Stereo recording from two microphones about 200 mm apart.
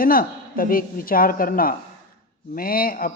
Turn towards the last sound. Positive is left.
turn(degrees=45)  # may be behind; listen again after turning